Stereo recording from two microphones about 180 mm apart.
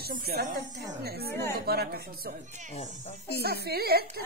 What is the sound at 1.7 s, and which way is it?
Speech, 60° right (ahead or behind).